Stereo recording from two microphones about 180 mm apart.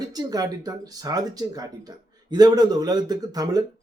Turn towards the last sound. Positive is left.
turn(degrees=-20)  # may be behind; listen again after turning